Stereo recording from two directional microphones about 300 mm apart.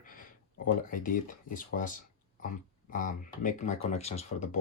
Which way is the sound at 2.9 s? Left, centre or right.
Left.